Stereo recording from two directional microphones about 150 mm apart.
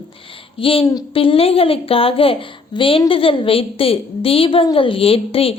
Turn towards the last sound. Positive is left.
turn(degrees=40)  # may be behind; listen again after turning